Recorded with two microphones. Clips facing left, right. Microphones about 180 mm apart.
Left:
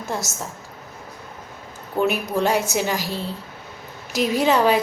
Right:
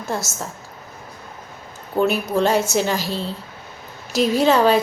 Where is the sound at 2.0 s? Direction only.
15° left (ahead or behind).